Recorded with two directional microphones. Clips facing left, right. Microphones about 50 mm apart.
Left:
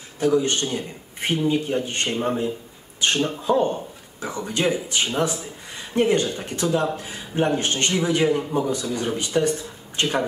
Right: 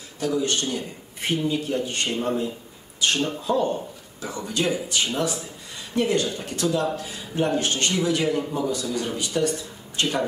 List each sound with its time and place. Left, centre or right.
0.2 s speech: left